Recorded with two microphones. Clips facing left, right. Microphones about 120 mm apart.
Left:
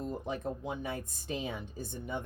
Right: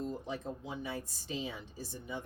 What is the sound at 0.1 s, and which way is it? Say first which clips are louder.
A woman's voice: left 3 dB; 55° left (ahead or behind).